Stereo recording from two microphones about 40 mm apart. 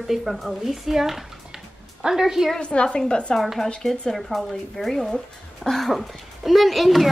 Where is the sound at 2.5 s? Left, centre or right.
Left.